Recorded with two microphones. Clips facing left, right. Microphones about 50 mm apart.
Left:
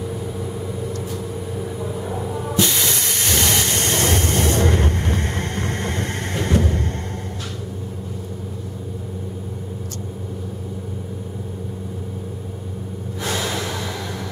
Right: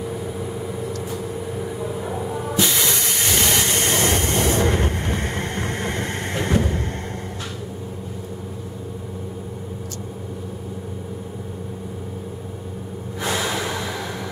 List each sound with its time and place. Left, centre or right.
0.0 s vehicle: centre
13.2 s snort: centre